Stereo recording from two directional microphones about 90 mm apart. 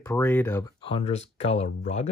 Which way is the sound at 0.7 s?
80° left.